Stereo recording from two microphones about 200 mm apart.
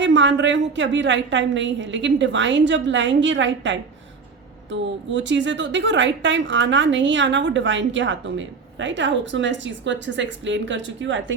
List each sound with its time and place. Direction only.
0.0 s a woman's voice: 65° right (ahead or behind)